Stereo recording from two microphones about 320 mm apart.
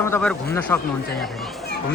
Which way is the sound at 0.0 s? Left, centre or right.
Centre.